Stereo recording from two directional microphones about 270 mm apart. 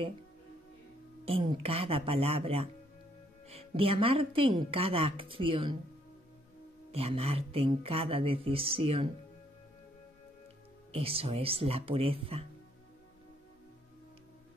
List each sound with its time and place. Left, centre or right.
1.2 s a woman's voice: right
6.9 s a woman's voice: right
10.9 s a woman's voice: right